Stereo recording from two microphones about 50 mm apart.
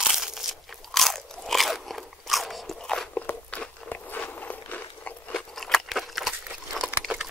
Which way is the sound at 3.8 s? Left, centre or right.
Left.